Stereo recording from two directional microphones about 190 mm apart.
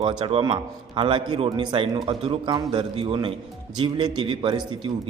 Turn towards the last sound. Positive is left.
turn(degrees=-25)  # may be behind; listen again after turning